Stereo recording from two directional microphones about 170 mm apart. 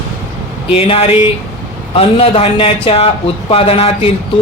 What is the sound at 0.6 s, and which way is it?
Speech, 35° left (ahead or behind).